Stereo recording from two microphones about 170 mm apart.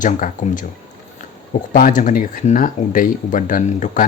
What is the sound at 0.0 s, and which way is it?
Speech, 50° left (ahead or behind).